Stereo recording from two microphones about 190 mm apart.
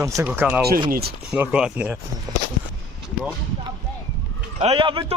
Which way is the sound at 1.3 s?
5° right (ahead or behind).